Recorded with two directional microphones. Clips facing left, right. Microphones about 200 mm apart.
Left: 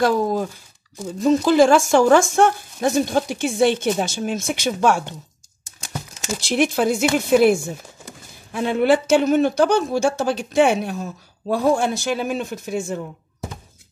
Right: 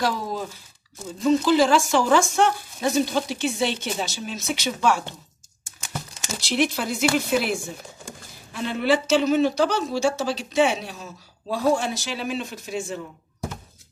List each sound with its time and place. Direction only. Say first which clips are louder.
0.0 s speech: left 7 dB; 50° left (ahead or behind)
6.4 s speech: left 5 dB; 50° left (ahead or behind)
8.5 s speech: left 5 dB; 50° left (ahead or behind)